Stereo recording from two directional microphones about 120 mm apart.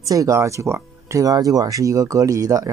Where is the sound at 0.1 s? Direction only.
25° right (ahead or behind).